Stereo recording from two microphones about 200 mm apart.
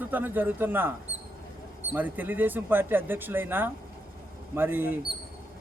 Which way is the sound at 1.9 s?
10° right (ahead or behind).